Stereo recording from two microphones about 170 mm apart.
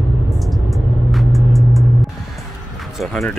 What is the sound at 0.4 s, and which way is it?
Vehicle, centre (ahead or behind).